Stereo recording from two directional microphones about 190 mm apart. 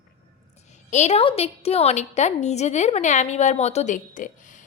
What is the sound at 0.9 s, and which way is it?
A woman's voice, 35° left (ahead or behind).